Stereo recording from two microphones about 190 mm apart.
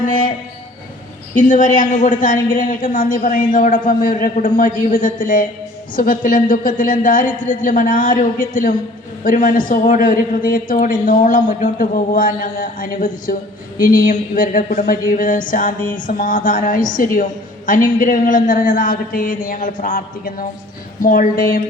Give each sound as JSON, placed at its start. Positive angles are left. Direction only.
{"t": 1.4, "sound": "a man's voice", "side_deg": 45}